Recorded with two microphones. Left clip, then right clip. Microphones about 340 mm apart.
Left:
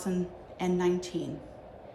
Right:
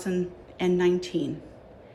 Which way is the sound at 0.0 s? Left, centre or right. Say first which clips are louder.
Right 5 dB; centre.